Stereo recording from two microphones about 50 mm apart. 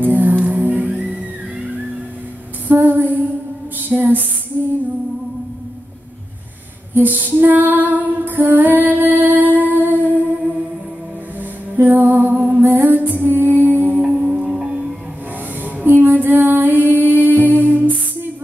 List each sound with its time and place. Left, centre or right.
0.0 s music: right
2.7 s a sound: right
3.9 s music: right
6.9 s female singing: right
9.7 s music: right
11.7 s music: right
14.0 s music: centre
15.6 s female singing: right